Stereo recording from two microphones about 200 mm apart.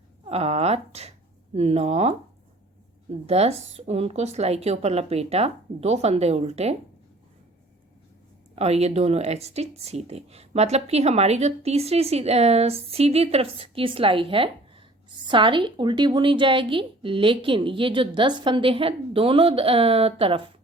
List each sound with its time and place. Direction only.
0.3 s speech: 30° right (ahead or behind)
8.5 s a woman's voice: 30° right (ahead or behind)